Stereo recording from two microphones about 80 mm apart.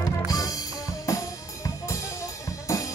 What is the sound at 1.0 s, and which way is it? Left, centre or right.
Drum, left.